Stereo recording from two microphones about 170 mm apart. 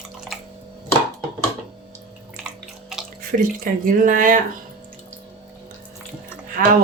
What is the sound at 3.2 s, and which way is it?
Speech, 55° right (ahead or behind).